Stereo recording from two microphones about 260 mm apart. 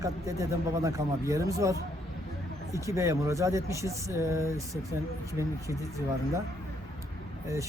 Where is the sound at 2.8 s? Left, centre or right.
Centre.